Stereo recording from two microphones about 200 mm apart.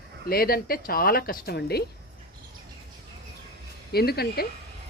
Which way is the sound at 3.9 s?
50° left (ahead or behind).